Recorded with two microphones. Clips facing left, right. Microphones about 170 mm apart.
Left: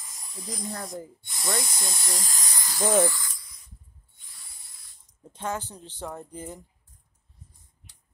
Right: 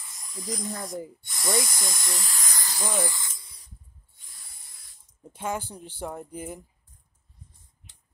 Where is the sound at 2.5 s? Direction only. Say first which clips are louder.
Right 1 dB; centre (ahead or behind).